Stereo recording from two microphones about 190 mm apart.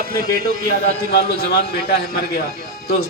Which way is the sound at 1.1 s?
55° left (ahead or behind).